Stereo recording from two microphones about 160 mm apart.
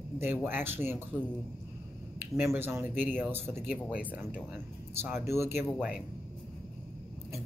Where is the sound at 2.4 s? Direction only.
15° right (ahead or behind).